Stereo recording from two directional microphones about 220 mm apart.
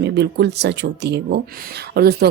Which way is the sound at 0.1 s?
50° right (ahead or behind).